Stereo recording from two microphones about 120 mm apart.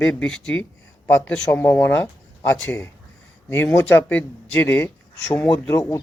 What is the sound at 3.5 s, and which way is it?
Speech, 15° left (ahead or behind).